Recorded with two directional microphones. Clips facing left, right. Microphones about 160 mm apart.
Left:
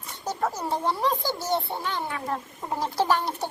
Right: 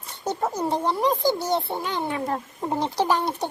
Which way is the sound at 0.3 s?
20° right (ahead or behind).